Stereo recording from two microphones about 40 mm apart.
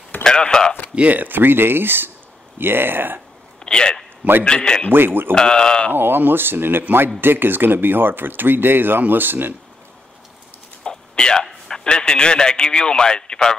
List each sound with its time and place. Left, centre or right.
0.2 s a sound: centre
0.9 s speech: right
3.6 s speech: centre
4.2 s a man's voice: right
4.9 s speech: right
5.3 s speech: centre
5.9 s speech: right
10.8 s a sound: left
11.6 s a man's voice: centre